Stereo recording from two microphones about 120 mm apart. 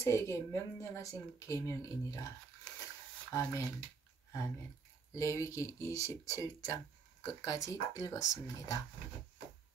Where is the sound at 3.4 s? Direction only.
25° left (ahead or behind).